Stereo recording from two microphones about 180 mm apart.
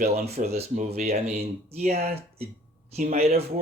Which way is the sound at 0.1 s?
35° right (ahead or behind).